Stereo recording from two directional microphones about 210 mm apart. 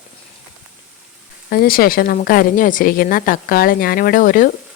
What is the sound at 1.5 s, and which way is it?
A woman's voice, 45° left (ahead or behind).